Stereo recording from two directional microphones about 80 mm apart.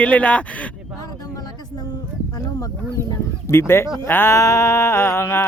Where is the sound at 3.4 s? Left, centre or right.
Left.